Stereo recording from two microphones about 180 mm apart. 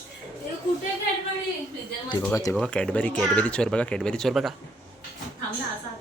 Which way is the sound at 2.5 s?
5° left (ahead or behind).